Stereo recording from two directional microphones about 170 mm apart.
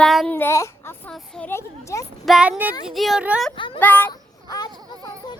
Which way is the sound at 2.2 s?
5° right (ahead or behind).